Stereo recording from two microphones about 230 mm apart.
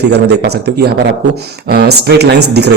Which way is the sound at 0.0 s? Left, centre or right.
Right.